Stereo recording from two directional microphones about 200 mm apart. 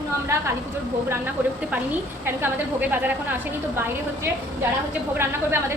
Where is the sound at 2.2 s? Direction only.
10° right (ahead or behind).